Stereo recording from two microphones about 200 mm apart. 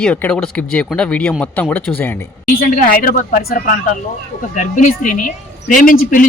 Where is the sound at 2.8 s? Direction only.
45° left (ahead or behind).